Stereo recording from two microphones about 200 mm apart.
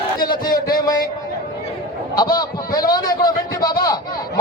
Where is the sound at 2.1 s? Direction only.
20° left (ahead or behind).